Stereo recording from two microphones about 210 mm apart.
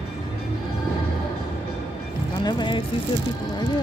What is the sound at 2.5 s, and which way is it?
Speech, 20° left (ahead or behind).